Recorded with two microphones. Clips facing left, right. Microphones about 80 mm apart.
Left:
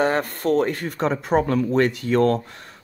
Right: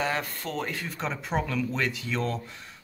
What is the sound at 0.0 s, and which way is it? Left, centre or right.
Speech, left.